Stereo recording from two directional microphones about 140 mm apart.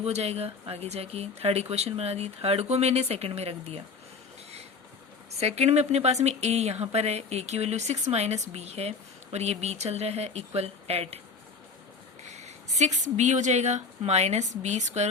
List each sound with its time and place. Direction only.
0.0 s speech: 50° right (ahead or behind)
5.4 s speech: 50° right (ahead or behind)
12.2 s speech: 55° right (ahead or behind)